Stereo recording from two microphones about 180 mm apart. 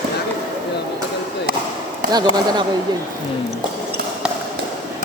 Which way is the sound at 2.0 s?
50° right (ahead or behind).